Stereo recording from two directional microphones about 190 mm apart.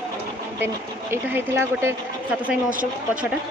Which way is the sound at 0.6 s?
10° right (ahead or behind).